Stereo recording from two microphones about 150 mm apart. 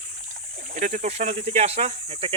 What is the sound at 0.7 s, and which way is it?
Speech, 55° right (ahead or behind).